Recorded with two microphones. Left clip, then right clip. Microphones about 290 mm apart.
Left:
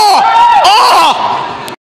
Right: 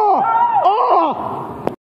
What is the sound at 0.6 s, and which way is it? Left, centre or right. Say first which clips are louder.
Speech: left 8 dB; centre.